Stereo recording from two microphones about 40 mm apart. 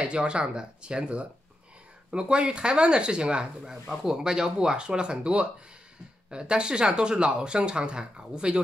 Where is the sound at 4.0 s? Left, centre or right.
Centre.